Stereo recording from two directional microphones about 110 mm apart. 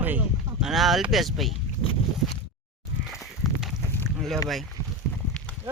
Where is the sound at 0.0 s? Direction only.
15° right (ahead or behind).